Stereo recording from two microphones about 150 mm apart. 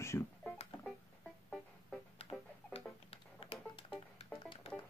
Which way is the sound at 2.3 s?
30° left (ahead or behind).